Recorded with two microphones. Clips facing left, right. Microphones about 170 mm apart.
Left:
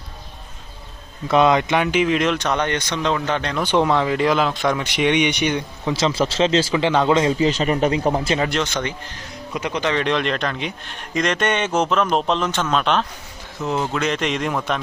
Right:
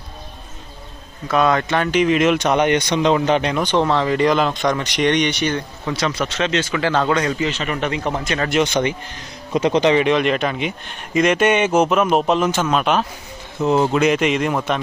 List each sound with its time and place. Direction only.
1.3 s speech: 20° left (ahead or behind); by 3.7 s 15° right (ahead or behind)
3.7 s speech: 10° left (ahead or behind)
6.0 s speech: 25° left (ahead or behind)
6.7 s a man's voice: 20° left (ahead or behind)
8.4 s speech: 10° right (ahead or behind)
9.5 s speech: 25° right (ahead or behind)
9.9 s speech: 5° right (ahead or behind)
13.6 s speech: 25° right (ahead or behind)
14.0 s a man's voice: 10° right (ahead or behind)